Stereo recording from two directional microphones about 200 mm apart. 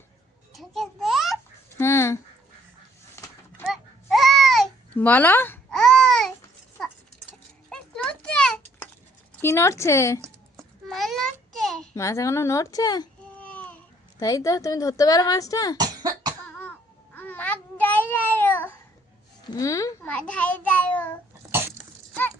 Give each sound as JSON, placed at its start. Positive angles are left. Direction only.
{"t": 0.5, "sound": "babbling", "side_deg": 0}
{"t": 1.8, "sound": "speech", "side_deg": 10}
{"t": 3.7, "sound": "babbling", "side_deg": 0}
{"t": 6.7, "sound": "a sound", "side_deg": 5}
{"t": 9.4, "sound": "speech", "side_deg": 10}
{"t": 10.8, "sound": "a sound", "side_deg": 0}
{"t": 11.9, "sound": "speech", "side_deg": 15}
{"t": 13.3, "sound": "a sound", "side_deg": 5}
{"t": 14.2, "sound": "speech", "side_deg": 15}
{"t": 15.8, "sound": "cough", "side_deg": -20}
{"t": 16.4, "sound": "cough", "side_deg": 5}
{"t": 17.2, "sound": "babbling", "side_deg": 10}
{"t": 19.5, "sound": "a sound", "side_deg": 15}
{"t": 20.1, "sound": "a child's voice", "side_deg": 5}